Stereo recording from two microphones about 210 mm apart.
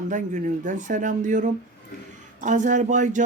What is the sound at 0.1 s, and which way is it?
Speech, 35° right (ahead or behind).